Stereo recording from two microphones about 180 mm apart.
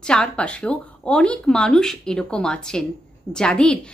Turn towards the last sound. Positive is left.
turn(degrees=5)  # may be behind; listen again after turning